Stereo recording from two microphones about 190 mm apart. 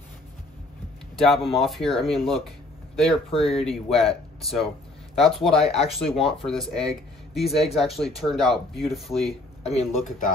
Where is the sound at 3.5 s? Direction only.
Centre (ahead or behind).